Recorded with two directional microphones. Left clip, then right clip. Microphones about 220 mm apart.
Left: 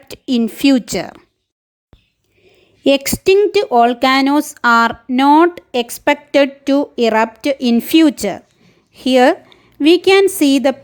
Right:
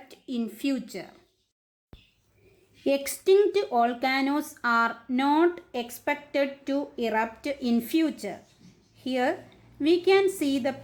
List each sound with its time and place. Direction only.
0.1 s a woman's voice: 45° left (ahead or behind)
2.8 s a woman's voice: 40° left (ahead or behind)